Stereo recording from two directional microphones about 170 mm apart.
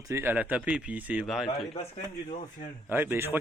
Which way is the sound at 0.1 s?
10° right (ahead or behind).